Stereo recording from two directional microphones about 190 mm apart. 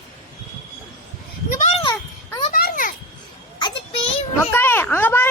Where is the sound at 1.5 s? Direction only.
40° left (ahead or behind).